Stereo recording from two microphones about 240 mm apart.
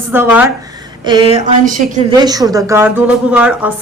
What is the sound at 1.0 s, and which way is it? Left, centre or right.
Speech, centre.